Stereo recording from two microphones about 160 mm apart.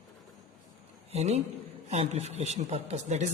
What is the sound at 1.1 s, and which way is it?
A man's voice, 40° right (ahead or behind).